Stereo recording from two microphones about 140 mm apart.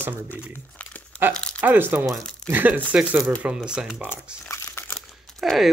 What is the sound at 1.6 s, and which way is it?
Speech, 15° right (ahead or behind).